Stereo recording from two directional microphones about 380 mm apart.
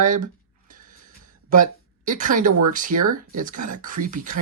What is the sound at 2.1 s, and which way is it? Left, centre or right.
Speech, right.